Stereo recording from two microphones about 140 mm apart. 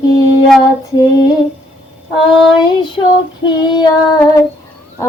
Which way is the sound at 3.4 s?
30° left (ahead or behind).